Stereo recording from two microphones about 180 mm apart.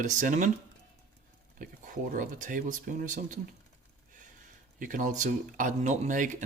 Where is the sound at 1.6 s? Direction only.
45° right (ahead or behind).